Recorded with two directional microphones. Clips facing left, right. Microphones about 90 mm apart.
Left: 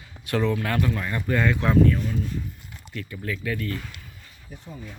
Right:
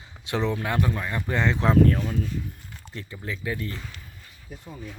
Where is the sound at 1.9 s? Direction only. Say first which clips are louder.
Even; 40° right (ahead or behind).